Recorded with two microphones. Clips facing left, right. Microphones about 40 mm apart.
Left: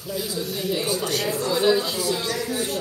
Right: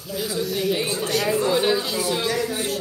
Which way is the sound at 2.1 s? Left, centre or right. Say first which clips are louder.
Right 2 dB; right.